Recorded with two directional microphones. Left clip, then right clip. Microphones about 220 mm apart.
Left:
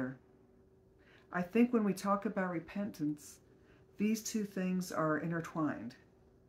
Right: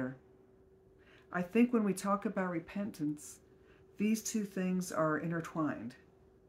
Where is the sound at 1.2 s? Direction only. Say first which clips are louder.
Right 1 dB; 5° right (ahead or behind).